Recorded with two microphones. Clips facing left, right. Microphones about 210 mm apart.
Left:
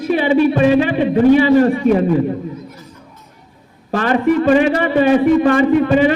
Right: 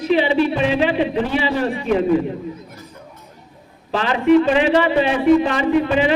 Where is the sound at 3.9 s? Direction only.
50° left (ahead or behind).